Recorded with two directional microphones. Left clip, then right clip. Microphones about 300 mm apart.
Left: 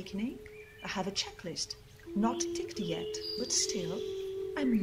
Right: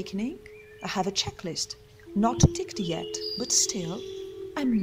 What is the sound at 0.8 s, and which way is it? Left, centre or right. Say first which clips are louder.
Speech: right 7 dB; right.